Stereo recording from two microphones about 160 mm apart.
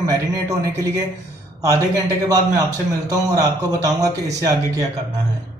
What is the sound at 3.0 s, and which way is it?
A man's voice, 25° right (ahead or behind).